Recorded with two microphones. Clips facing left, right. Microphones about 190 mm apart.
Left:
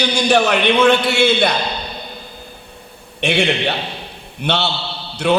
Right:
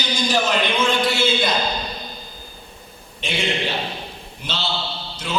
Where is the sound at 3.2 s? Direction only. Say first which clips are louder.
Left 7 dB; 65° left (ahead or behind).